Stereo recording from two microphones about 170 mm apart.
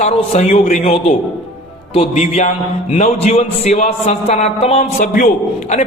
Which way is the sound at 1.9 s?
40° left (ahead or behind).